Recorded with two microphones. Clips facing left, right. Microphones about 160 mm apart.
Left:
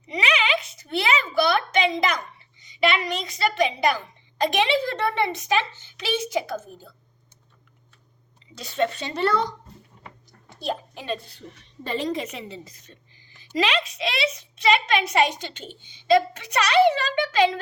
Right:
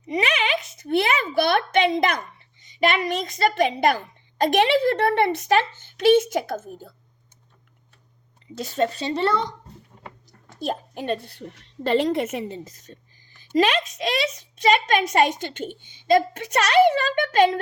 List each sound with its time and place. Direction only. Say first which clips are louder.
0.1 s speech: right 1 dB; 50° right (ahead or behind)
8.5 s speech: right 1 dB; 45° right (ahead or behind); by 9.5 s 25° right (ahead or behind)
10.5 s a woman's voice: right 1 dB; 45° right (ahead or behind)